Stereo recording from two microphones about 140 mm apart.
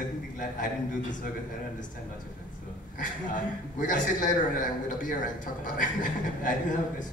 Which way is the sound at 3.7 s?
70° left (ahead or behind).